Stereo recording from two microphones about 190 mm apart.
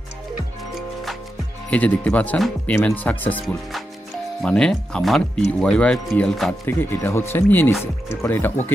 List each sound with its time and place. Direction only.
1.7 s speech: 5° left (ahead or behind)